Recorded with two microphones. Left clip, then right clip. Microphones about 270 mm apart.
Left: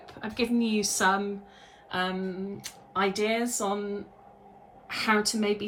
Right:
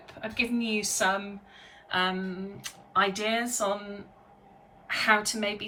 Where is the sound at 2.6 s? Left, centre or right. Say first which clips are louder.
Right 3 dB; centre.